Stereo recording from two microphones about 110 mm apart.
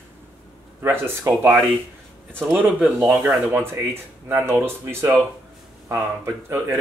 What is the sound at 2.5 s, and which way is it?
Speech, 10° right (ahead or behind).